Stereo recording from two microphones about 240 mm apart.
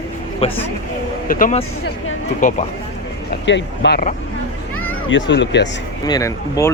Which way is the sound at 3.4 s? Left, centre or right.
Left.